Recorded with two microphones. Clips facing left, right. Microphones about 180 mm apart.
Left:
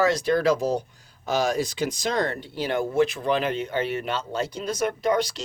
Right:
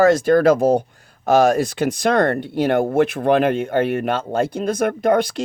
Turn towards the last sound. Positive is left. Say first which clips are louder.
# right 6 dB
turn(degrees=-55)  # may be behind; listen again after turning